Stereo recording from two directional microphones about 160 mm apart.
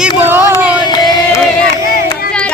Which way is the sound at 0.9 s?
25° left (ahead or behind).